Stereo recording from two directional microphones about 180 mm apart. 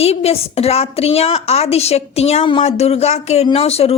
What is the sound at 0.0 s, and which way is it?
A woman's voice, 35° left (ahead or behind).